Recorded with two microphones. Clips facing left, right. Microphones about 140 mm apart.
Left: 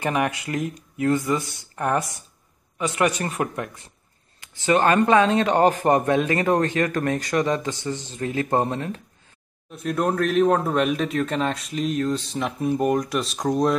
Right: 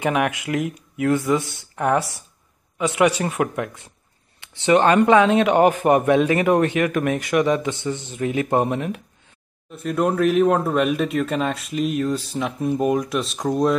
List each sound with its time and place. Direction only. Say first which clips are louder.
0.0 s speech: right 2 dB; 10° right (ahead or behind)
3.2 s speech: right 3 dB; 5° right (ahead or behind)
4.6 s speech: right 3 dB; 20° right (ahead or behind)
9.7 s speech: right 2 dB; centre (ahead or behind)